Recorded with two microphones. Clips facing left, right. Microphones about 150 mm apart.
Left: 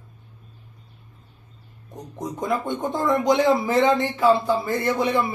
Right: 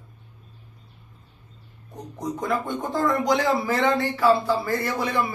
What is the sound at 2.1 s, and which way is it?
Speech, 20° left (ahead or behind).